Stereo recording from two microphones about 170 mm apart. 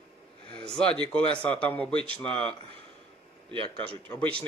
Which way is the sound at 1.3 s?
5° left (ahead or behind).